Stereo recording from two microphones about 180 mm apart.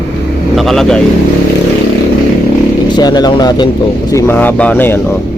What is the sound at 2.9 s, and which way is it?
Speech, 25° left (ahead or behind).